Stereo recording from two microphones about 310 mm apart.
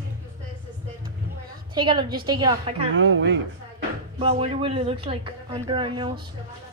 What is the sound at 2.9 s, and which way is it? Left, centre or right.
Speech, right.